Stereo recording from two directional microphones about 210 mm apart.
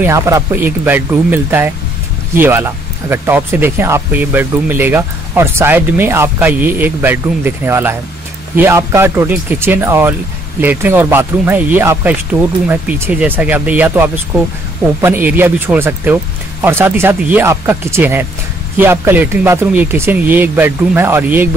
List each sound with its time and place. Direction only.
0.0 s speech: 15° right (ahead or behind)